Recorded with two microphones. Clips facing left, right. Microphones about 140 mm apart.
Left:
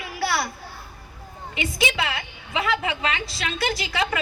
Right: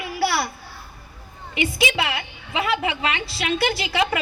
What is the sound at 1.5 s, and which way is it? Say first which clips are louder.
Speech: right 4 dB; 30° left (ahead or behind).